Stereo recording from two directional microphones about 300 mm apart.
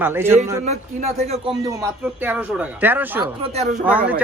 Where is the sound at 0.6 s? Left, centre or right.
Right.